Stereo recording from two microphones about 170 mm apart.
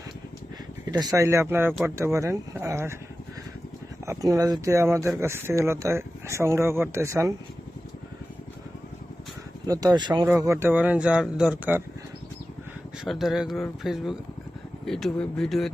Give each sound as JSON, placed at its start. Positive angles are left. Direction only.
{"t": 0.9, "sound": "speech", "side_deg": -20}
{"t": 4.0, "sound": "speech", "side_deg": -20}
{"t": 9.6, "sound": "speech", "side_deg": -20}
{"t": 13.1, "sound": "speech", "side_deg": 0}